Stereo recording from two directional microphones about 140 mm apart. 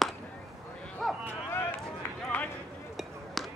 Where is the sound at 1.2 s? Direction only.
15° left (ahead or behind).